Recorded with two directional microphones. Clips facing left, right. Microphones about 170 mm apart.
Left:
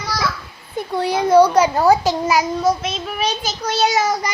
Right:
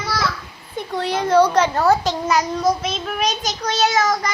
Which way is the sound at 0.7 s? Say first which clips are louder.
Left 3 dB; 10° left (ahead or behind).